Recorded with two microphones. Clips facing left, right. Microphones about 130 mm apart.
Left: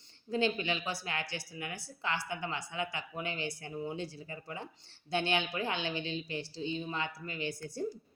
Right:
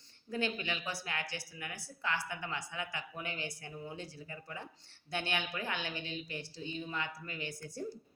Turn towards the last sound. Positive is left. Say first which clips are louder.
# left 4 dB
turn(degrees=25)  # may be behind; listen again after turning